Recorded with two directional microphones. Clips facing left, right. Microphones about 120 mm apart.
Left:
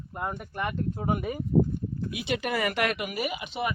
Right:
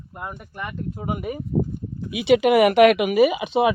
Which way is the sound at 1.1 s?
15° right (ahead or behind).